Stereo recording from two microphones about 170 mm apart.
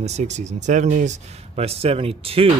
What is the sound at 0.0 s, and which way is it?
Speech, 40° right (ahead or behind).